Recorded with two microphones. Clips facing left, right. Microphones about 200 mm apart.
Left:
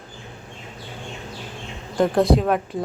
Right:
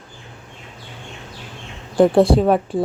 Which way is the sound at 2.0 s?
30° right (ahead or behind).